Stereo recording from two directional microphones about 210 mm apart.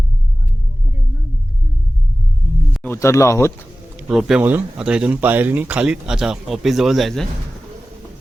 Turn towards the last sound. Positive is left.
turn(degrees=0)  # may be behind; listen again after turning